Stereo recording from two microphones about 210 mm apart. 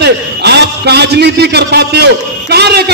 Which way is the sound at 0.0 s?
50° right (ahead or behind).